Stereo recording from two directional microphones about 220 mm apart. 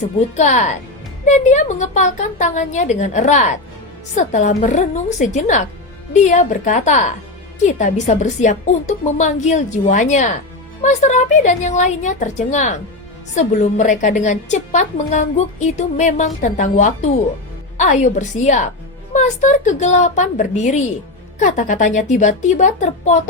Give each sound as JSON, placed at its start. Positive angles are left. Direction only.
{"t": 0.3, "sound": "a woman's voice", "side_deg": 30}